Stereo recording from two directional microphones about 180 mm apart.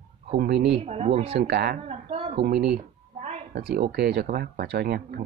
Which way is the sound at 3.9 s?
65° right (ahead or behind).